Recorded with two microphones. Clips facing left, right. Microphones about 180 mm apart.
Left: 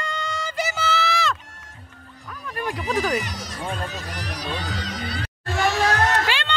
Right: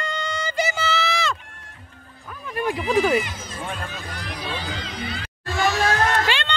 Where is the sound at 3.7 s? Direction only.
35° left (ahead or behind).